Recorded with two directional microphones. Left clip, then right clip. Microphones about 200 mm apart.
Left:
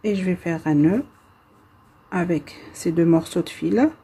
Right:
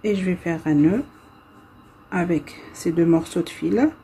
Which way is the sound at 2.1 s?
15° left (ahead or behind).